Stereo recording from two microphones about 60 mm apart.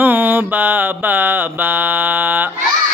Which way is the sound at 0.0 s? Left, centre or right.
Right.